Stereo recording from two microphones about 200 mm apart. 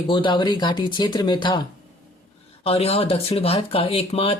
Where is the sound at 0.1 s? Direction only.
25° left (ahead or behind).